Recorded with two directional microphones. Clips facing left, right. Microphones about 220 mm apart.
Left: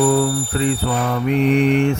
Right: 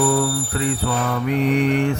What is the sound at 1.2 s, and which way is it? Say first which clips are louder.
Mantra: left 3 dB; 25° left (ahead or behind).